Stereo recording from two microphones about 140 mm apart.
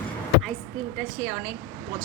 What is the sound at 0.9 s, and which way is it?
Speech, 10° right (ahead or behind).